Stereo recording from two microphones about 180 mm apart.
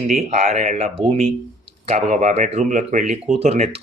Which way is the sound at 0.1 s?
35° right (ahead or behind).